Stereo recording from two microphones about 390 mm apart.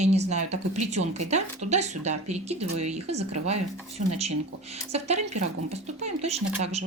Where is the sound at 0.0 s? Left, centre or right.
Centre.